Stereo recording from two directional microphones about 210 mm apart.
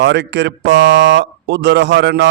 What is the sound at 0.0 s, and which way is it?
Mantra, 55° right (ahead or behind).